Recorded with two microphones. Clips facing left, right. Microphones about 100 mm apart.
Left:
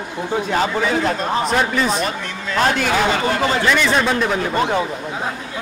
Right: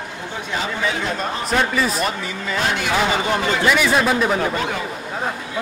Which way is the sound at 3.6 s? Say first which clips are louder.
Right 2 dB; 5° right (ahead or behind).